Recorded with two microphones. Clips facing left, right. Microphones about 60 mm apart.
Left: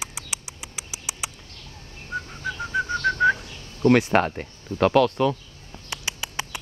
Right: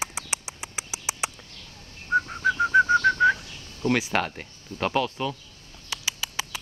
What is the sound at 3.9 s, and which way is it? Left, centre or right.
Speech, left.